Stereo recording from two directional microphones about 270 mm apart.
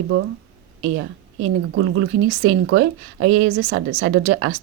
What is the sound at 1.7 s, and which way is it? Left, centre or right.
Speech, right.